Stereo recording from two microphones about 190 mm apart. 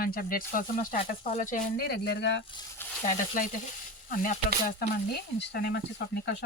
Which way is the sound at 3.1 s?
45° left (ahead or behind).